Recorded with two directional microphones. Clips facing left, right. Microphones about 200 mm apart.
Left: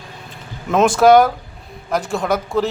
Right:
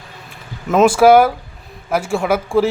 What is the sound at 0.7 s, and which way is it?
A man's voice, 5° right (ahead or behind).